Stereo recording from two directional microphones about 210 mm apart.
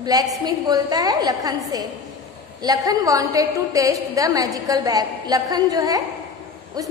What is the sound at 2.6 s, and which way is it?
A woman's voice, 20° right (ahead or behind).